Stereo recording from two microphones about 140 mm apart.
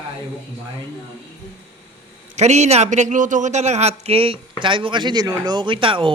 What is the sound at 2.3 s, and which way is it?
A man's voice, 55° right (ahead or behind).